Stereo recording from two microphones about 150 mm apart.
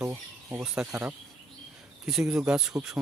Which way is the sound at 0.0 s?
15° right (ahead or behind).